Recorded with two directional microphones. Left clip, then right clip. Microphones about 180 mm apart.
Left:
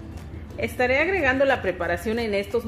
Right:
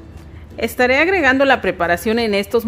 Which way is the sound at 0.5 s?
50° right (ahead or behind).